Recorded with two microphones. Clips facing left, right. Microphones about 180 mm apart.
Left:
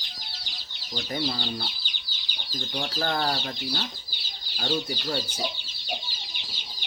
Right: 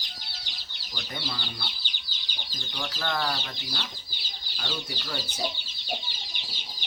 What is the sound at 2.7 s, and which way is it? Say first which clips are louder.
Speech: left 3 dB; 35° left (ahead or behind).